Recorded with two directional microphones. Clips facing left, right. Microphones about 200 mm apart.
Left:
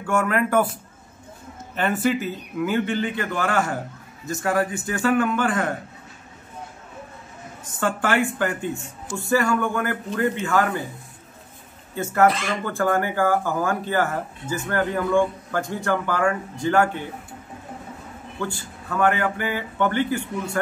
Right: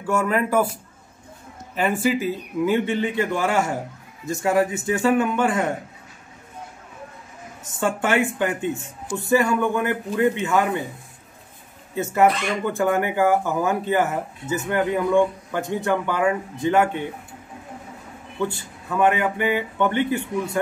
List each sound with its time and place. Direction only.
0.0 s a man's voice: 5° right (ahead or behind)
1.8 s a man's voice: 10° right (ahead or behind)
2.6 s speech: 25° right (ahead or behind)
7.8 s speech: 20° right (ahead or behind)
12.6 s speech: 20° right (ahead or behind)
18.4 s speech: 25° right (ahead or behind)